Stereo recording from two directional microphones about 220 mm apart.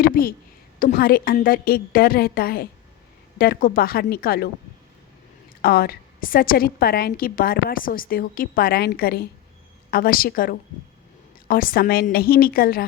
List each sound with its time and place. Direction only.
0.0 s a woman's voice: 40° left (ahead or behind)
5.6 s a woman's voice: 45° left (ahead or behind)